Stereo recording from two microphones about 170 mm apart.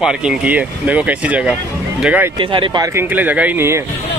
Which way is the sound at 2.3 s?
30° right (ahead or behind).